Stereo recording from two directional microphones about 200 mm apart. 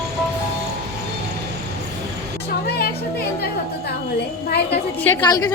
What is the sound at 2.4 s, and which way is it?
Music, 50° left (ahead or behind).